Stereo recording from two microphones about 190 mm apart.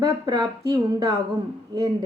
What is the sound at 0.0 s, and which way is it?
Speech, 20° right (ahead or behind).